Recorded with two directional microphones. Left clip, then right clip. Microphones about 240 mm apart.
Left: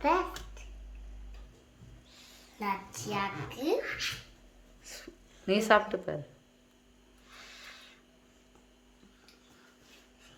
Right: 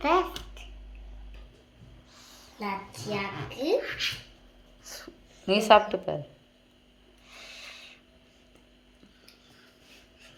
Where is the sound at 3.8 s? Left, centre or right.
Centre.